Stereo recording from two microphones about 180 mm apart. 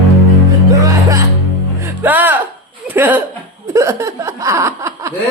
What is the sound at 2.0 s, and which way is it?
Music, 10° right (ahead or behind).